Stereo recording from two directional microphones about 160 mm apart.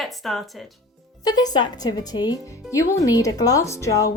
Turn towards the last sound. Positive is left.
turn(degrees=20)  # may be behind; listen again after turning